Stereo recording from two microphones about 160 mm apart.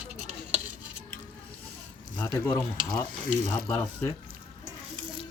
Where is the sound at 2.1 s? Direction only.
10° left (ahead or behind).